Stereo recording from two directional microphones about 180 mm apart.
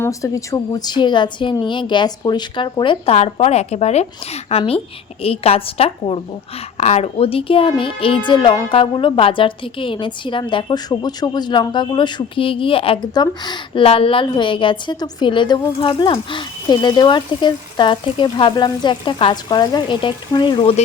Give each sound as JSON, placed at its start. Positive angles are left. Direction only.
{"t": 0.0, "sound": "a woman's voice", "side_deg": 15}